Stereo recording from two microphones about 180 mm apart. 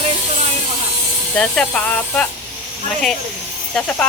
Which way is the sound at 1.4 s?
5° left (ahead or behind).